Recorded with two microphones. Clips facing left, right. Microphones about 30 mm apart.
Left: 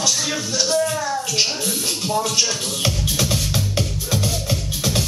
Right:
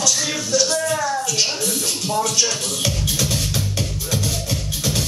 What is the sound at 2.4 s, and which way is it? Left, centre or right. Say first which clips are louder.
Music: even; centre.